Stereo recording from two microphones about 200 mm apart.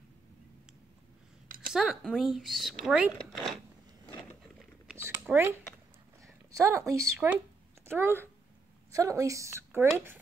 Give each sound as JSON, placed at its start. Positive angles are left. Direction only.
{"t": 1.7, "sound": "speech", "side_deg": 0}
{"t": 4.8, "sound": "a sound", "side_deg": -10}
{"t": 6.2, "sound": "a woman's voice", "side_deg": -15}